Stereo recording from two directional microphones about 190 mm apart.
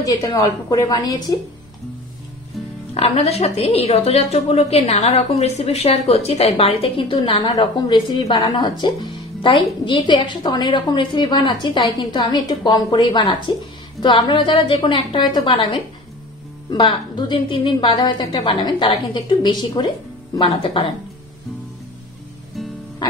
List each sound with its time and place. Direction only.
0.0 s a woman's voice: 20° left (ahead or behind)
2.9 s a woman's voice: 35° left (ahead or behind)